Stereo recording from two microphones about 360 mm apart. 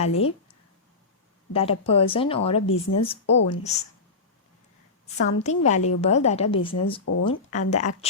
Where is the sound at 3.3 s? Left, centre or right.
Left.